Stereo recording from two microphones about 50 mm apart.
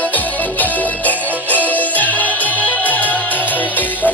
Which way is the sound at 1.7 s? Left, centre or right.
Left.